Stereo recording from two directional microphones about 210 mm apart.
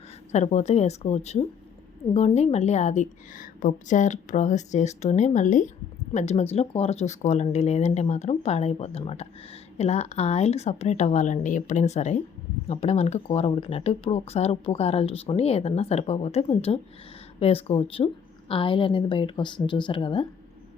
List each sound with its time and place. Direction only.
0.3 s speech: 30° left (ahead or behind)